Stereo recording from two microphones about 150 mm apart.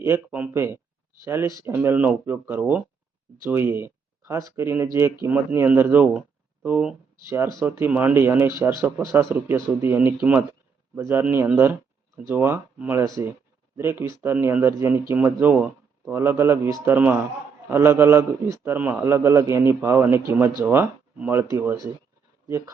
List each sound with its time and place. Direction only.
0.0 s speech: 15° right (ahead or behind)
7.3 s speech: 20° right (ahead or behind)